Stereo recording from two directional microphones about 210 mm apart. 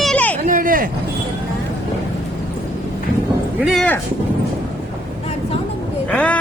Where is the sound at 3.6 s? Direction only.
Centre (ahead or behind).